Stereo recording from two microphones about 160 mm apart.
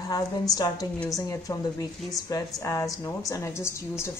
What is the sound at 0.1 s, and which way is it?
A woman's voice, 25° left (ahead or behind).